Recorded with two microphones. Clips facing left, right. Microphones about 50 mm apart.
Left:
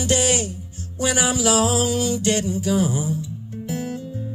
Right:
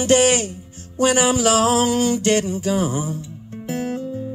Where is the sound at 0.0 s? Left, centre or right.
Right.